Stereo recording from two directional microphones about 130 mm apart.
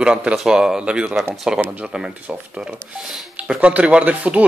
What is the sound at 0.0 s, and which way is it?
Speech, 10° right (ahead or behind).